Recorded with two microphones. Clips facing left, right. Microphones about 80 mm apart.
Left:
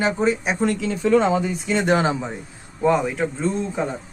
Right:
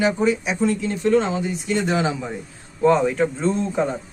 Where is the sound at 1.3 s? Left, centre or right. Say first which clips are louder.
Left 1 dB; left.